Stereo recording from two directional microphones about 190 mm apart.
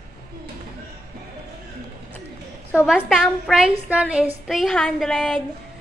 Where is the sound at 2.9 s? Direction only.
Centre (ahead or behind).